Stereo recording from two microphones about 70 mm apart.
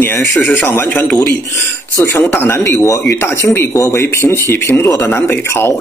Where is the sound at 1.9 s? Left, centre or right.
Left.